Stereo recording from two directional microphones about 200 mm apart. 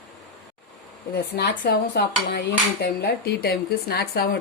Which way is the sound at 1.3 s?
50° left (ahead or behind).